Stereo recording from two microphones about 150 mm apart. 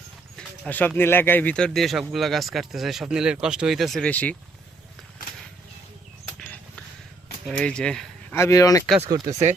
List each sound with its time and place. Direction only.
0.3 s speech: 10° left (ahead or behind)
7.4 s speech: 5° left (ahead or behind)
8.4 s speech: 20° left (ahead or behind)
9.0 s speech: 30° right (ahead or behind)
9.3 s speech: 50° right (ahead or behind)